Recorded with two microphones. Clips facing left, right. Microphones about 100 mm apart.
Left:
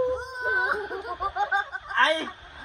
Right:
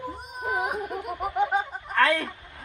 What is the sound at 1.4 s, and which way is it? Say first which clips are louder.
Snicker: right 1 dB; 20° left (ahead or behind).